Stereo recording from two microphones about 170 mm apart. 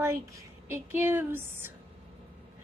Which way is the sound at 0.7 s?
10° right (ahead or behind).